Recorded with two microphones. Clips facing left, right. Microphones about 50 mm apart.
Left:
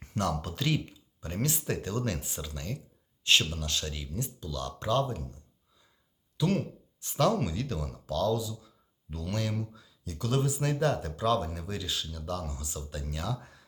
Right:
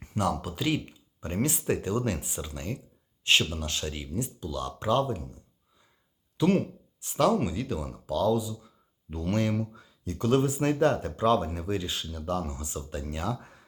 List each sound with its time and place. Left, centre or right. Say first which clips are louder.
0.0 s speech: right 3 dB; centre
1.2 s speech: right 4 dB; right
6.3 s speech: right 5 dB; right
7.0 s speech: right 3 dB; centre